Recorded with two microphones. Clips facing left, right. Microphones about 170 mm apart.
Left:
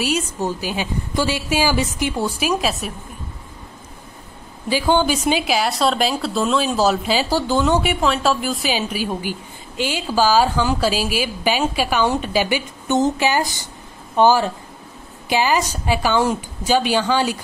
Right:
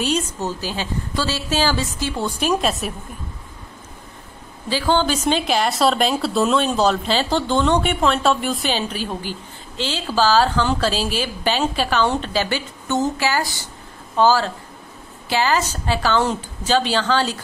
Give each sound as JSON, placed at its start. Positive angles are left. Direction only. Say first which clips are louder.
{"t": 0.0, "sound": "speech", "louder": "left 1 dB", "side_deg": 10}
{"t": 4.6, "sound": "speech", "louder": "left 2 dB", "side_deg": 15}